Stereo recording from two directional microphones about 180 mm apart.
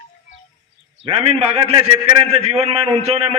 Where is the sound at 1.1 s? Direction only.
35° right (ahead or behind).